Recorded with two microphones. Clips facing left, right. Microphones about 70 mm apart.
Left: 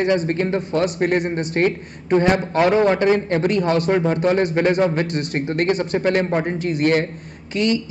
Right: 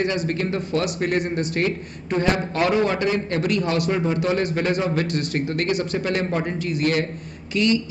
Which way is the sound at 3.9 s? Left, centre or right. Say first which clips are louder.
Left 4 dB; left.